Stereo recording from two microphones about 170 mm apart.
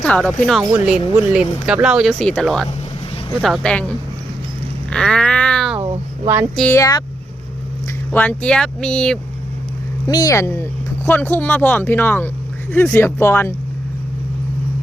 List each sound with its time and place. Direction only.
0.0 s speech: 5° left (ahead or behind)
4.9 s a sound: 5° left (ahead or behind)
6.2 s a sound: 15° right (ahead or behind)
6.6 s speech: 15° left (ahead or behind)
8.1 s speech: 10° left (ahead or behind)
10.1 s speech: 20° left (ahead or behind)